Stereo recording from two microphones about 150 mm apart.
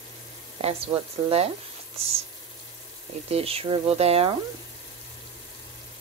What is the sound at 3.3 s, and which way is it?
Speech, 40° right (ahead or behind).